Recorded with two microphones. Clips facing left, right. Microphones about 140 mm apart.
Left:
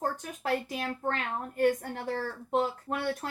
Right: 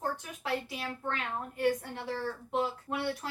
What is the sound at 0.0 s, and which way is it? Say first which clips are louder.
A woman's voice: left 3 dB; 50° left (ahead or behind).